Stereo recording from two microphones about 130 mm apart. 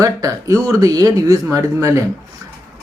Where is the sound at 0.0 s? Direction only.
25° right (ahead or behind).